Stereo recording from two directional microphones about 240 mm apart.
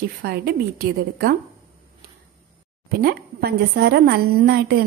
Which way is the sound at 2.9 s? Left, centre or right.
Right.